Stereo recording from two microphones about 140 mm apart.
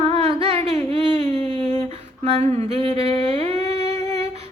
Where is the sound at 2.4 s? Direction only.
50° right (ahead or behind).